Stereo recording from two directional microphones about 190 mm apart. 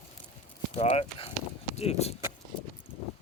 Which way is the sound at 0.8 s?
35° left (ahead or behind).